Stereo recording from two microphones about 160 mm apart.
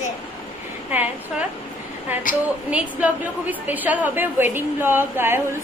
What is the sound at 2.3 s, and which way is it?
Speech, 55° left (ahead or behind).